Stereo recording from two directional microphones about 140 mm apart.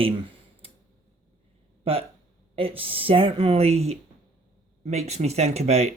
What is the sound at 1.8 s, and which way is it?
Speech, 40° right (ahead or behind).